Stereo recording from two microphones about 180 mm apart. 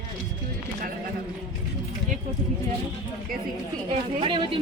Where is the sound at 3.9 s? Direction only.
30° right (ahead or behind).